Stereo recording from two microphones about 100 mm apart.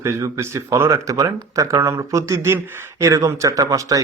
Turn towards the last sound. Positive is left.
turn(degrees=-35)  # may be behind; listen again after turning